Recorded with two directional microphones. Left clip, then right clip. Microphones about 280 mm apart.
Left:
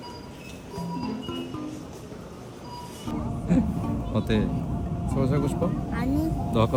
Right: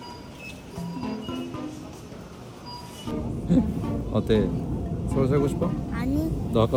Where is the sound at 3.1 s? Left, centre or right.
Centre.